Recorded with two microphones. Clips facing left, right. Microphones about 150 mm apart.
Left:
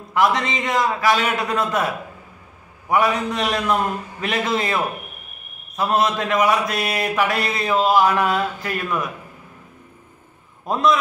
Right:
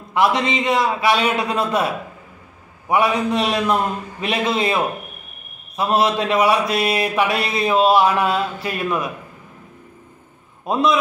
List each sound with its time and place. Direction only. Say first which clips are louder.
0.1 s speech: right 1 dB; 20° right (ahead or behind)
2.9 s speech: right 2 dB; 25° right (ahead or behind)
5.9 s speech: right 2 dB; 25° right (ahead or behind)
10.6 s a man's voice: even; 20° right (ahead or behind)